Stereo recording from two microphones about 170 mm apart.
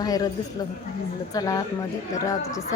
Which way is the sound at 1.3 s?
20° left (ahead or behind).